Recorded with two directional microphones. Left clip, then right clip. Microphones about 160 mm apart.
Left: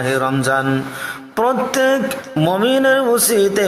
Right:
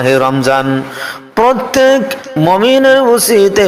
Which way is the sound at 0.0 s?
20° right (ahead or behind).